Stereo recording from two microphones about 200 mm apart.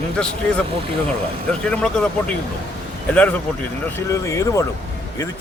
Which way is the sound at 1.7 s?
5° left (ahead or behind).